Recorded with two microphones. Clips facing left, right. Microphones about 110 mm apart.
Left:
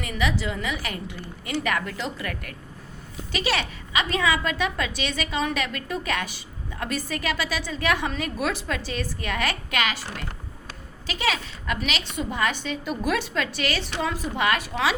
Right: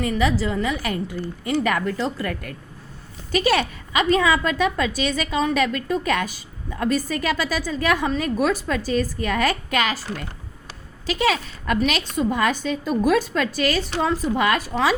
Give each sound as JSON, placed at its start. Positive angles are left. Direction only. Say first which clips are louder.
{"t": 0.0, "sound": "a woman's voice", "louder": "right 6 dB", "side_deg": -35}
{"t": 3.3, "sound": "a woman's voice", "louder": "right 7 dB", "side_deg": -45}
{"t": 11.0, "sound": "a woman's voice", "louder": "right 5 dB", "side_deg": -40}